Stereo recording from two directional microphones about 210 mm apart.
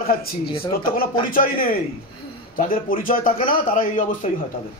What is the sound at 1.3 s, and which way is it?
A man's voice, 45° left (ahead or behind).